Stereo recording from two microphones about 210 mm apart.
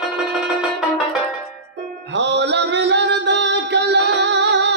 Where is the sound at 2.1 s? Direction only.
55° right (ahead or behind).